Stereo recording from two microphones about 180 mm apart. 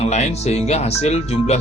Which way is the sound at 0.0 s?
35° left (ahead or behind).